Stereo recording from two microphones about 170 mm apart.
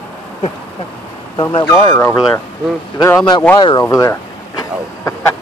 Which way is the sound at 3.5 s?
25° left (ahead or behind).